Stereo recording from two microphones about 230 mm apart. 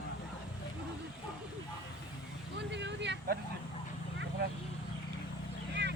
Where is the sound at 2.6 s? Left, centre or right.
Right.